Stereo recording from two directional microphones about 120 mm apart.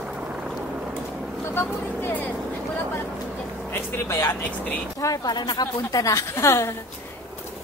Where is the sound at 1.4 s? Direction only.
20° left (ahead or behind).